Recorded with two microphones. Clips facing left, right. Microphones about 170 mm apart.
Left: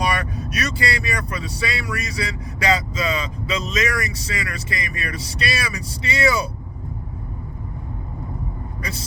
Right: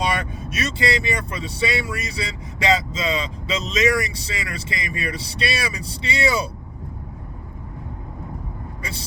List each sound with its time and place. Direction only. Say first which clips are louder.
0.0 s speech: left 1 dB; 25° right (ahead or behind)
8.8 s speech: left 3 dB; 30° right (ahead or behind)